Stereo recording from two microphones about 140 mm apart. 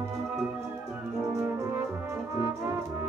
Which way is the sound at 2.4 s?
20° right (ahead or behind).